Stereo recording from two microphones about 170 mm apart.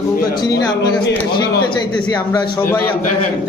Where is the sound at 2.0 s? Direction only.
25° left (ahead or behind).